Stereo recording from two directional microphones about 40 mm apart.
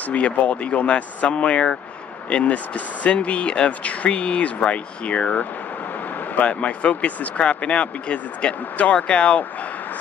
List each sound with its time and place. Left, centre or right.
0.1 s speech: left